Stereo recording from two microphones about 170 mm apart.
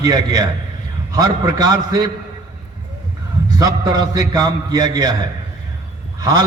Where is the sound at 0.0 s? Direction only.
20° right (ahead or behind).